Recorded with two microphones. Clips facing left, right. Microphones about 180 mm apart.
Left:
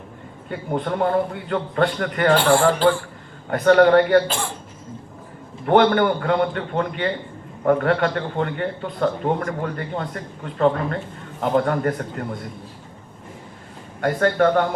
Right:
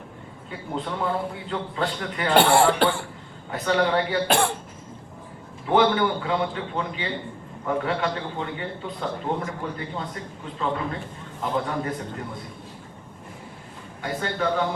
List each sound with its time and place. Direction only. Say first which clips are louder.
0.7 s a man's voice: left 6 dB; 55° left (ahead or behind)
2.3 s speech: even; 65° right (ahead or behind)
3.5 s a man's voice: left 9 dB; 55° left (ahead or behind)
4.3 s speech: right 6 dB; 65° right (ahead or behind)
5.6 s a man's voice: left 4 dB; 55° left (ahead or behind)
11.5 s a man's voice: left 7 dB; 60° left (ahead or behind)
14.0 s a man's voice: left 9 dB; 60° left (ahead or behind)